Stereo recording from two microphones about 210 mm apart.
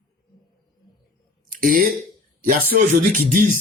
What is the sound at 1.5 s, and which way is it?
Speech, 40° right (ahead or behind).